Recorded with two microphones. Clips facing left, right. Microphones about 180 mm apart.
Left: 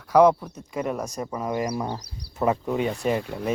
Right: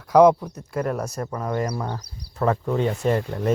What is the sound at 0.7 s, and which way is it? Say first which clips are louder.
Speech: right 2 dB; 5° left (ahead or behind).